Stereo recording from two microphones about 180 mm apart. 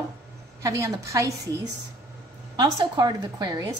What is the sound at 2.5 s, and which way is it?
A woman's voice, 25° right (ahead or behind).